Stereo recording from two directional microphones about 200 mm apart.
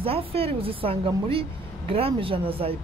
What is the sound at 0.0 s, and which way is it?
A woman's voice, 30° right (ahead or behind).